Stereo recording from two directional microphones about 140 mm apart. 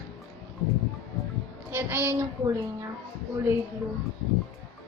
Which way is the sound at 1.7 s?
15° right (ahead or behind).